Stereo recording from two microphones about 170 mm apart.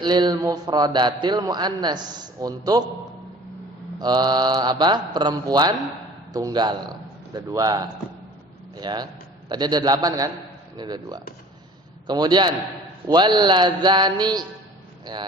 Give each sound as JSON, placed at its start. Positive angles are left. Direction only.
{"t": 0.0, "sound": "a man's voice", "side_deg": -25}
{"t": 4.0, "sound": "a man's voice", "side_deg": -25}